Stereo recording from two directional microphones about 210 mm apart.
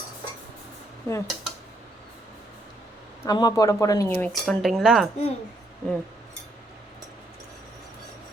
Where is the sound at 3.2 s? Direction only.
20° left (ahead or behind); by 5.1 s centre (ahead or behind).